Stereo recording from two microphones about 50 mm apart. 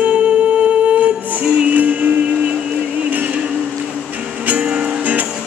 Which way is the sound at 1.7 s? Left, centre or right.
Right.